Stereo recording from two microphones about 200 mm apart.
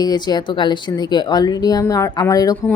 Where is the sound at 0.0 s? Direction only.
20° left (ahead or behind).